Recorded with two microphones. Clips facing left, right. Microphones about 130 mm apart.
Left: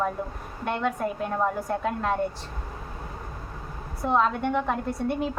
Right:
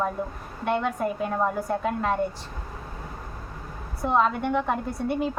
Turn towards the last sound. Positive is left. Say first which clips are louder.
# even
turn(degrees=0)  # may be behind; listen again after turning